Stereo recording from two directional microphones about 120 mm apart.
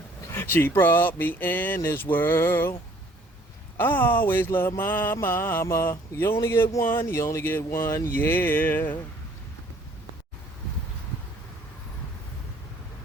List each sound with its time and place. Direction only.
0.3 s speech: 20° left (ahead or behind)
3.8 s speech: 15° left (ahead or behind)
4.8 s mantra: 15° left (ahead or behind)
7.8 s speech: 25° left (ahead or behind)